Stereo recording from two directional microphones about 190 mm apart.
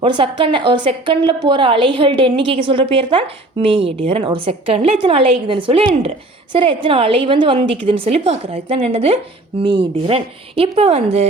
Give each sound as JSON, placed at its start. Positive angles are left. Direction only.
{"t": 0.0, "sound": "a woman's voice", "side_deg": -25}